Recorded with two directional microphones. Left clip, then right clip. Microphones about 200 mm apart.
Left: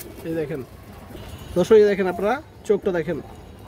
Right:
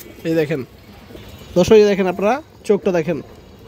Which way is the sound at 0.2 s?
40° right (ahead or behind).